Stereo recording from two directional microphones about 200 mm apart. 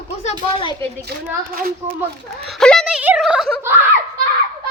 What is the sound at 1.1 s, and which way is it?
Speech, 55° right (ahead or behind).